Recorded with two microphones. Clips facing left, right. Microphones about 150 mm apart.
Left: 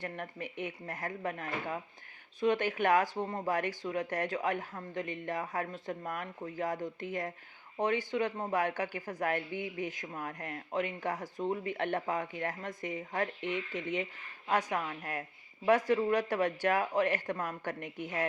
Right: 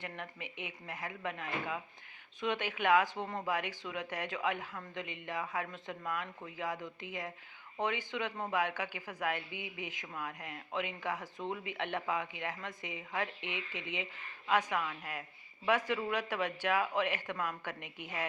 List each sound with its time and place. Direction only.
0.0 s speech: 45° left (ahead or behind)
3.2 s speech: 30° left (ahead or behind)
3.5 s speech: 40° left (ahead or behind)